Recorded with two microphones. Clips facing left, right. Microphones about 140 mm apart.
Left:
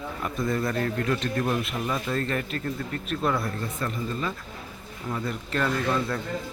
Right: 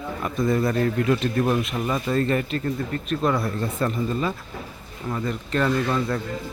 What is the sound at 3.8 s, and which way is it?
Speech, 35° right (ahead or behind).